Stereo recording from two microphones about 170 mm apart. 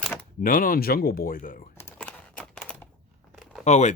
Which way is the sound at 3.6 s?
45° left (ahead or behind).